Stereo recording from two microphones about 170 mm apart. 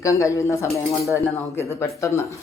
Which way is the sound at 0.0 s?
20° left (ahead or behind).